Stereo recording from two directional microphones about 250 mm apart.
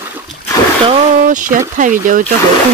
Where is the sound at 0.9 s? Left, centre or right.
Right.